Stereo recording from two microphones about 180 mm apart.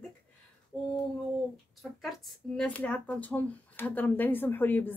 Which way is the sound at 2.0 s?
Centre (ahead or behind).